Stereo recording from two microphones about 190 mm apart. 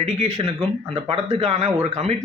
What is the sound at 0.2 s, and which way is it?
Speech, 35° right (ahead or behind).